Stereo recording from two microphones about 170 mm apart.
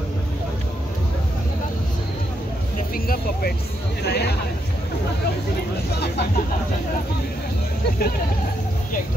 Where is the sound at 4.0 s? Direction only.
70° left (ahead or behind).